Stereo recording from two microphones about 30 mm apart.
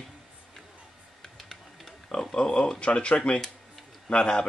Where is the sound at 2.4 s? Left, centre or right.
Left.